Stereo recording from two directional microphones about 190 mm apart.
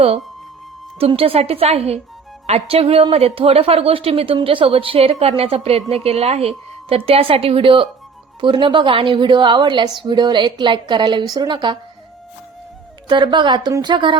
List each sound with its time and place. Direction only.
0.9 s a woman's voice: 30° right (ahead or behind)
13.1 s a woman's voice: 25° right (ahead or behind)